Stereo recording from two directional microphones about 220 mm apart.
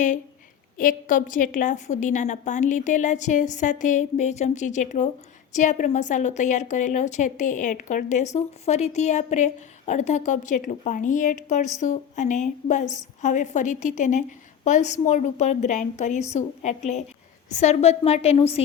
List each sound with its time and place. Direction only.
0.8 s a woman's voice: 40° left (ahead or behind)